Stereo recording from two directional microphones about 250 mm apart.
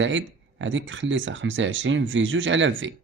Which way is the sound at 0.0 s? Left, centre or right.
Right.